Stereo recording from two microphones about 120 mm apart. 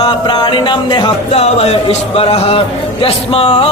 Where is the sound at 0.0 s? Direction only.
40° left (ahead or behind).